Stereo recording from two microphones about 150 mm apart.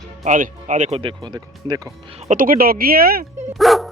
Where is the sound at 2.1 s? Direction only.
60° right (ahead or behind); by 3.2 s 85° right.